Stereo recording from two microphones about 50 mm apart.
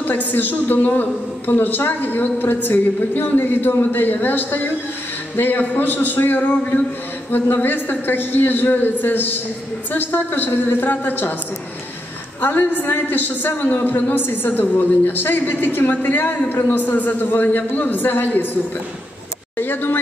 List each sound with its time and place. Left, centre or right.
0.0 s a woman's voice: left
12.4 s a woman's voice: left
19.6 s speech: left